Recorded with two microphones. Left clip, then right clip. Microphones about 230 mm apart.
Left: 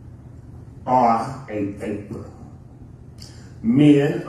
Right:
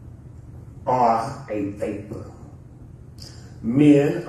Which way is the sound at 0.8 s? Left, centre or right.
Centre.